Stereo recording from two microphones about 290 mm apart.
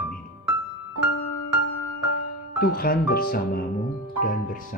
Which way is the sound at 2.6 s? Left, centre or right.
Left.